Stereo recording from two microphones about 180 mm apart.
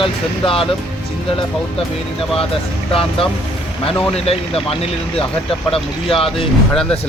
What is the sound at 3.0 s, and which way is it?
Speech, 30° left (ahead or behind).